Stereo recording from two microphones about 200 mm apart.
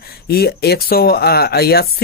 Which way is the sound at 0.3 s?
50° left (ahead or behind).